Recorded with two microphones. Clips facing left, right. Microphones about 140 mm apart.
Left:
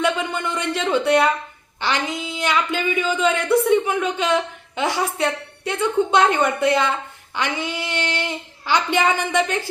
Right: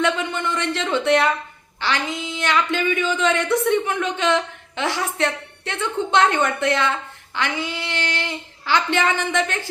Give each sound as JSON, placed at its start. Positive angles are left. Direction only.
{"t": 0.0, "sound": "music", "side_deg": 15}
{"t": 1.8, "sound": "speech", "side_deg": 15}